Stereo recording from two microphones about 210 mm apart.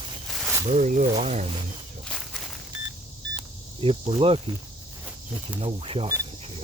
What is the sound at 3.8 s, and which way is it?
Speech, 25° right (ahead or behind).